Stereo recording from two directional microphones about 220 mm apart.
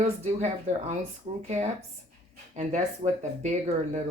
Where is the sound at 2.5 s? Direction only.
30° right (ahead or behind).